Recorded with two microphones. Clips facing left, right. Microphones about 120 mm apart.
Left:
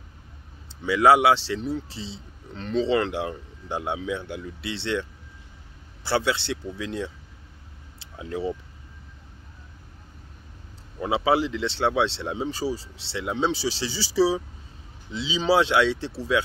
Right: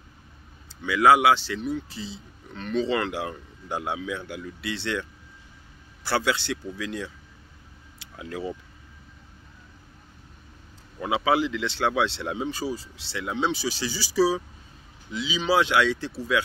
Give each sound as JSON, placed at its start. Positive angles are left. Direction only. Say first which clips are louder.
{"t": 0.8, "sound": "a man's voice", "louder": "left 1 dB", "side_deg": 30}
{"t": 6.0, "sound": "a man's voice", "louder": "left 1 dB", "side_deg": 25}
{"t": 11.0, "sound": "a man's voice", "louder": "left 1 dB", "side_deg": 30}